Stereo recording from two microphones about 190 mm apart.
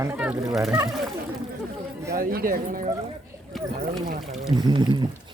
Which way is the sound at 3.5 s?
Centre (ahead or behind).